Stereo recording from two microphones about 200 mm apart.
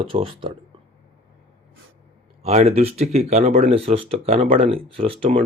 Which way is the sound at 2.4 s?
30° right (ahead or behind).